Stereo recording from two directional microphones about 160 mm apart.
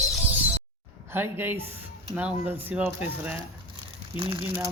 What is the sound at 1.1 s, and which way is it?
Speech, 15° right (ahead or behind).